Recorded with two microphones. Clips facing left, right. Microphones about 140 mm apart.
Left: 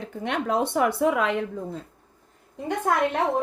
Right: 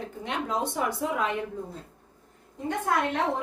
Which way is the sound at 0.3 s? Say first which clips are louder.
Left 5 dB; 60° left (ahead or behind).